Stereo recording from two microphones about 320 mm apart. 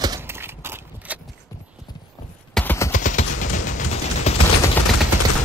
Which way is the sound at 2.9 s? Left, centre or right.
Left.